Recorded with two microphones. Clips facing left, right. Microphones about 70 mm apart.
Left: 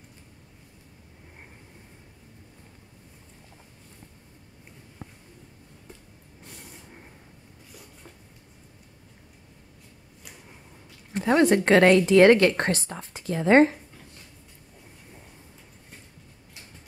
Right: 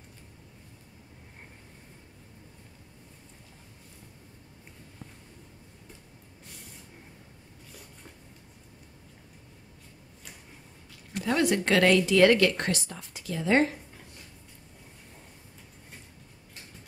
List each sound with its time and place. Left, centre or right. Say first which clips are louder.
11.1 s speech: left 6 dB; left